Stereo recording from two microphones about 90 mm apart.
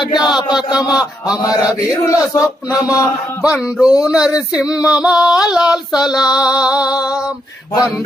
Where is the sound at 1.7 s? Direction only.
35° left (ahead or behind).